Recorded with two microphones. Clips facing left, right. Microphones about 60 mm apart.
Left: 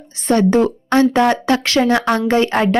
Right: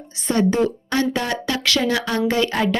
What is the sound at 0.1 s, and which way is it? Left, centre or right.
Speech, left.